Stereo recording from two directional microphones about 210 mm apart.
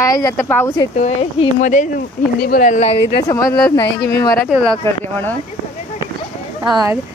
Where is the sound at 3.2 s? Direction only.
15° left (ahead or behind).